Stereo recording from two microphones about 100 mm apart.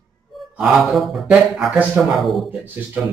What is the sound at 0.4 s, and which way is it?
Mantra, centre (ahead or behind).